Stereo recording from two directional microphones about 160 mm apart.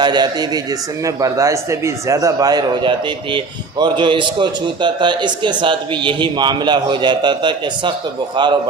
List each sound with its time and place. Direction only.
0.0 s a man's voice: 25° right (ahead or behind)